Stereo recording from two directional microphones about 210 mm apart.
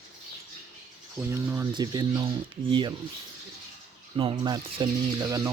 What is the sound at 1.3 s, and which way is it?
Speech, 10° right (ahead or behind).